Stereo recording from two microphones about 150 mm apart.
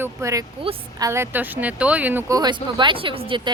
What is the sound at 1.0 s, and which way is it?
A woman's voice, 15° right (ahead or behind).